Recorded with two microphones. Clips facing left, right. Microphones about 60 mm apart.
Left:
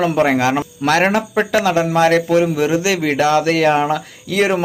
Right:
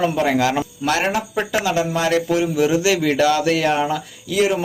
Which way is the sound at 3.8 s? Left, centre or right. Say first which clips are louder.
Left 3 dB; left.